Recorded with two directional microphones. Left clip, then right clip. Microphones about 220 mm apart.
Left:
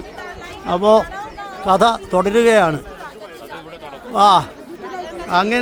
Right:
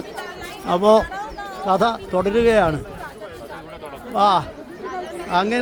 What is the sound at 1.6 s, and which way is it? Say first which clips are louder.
A man's voice: left 5 dB; 20° left (ahead or behind).